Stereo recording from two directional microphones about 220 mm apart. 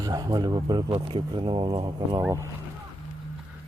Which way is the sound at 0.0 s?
15° right (ahead or behind).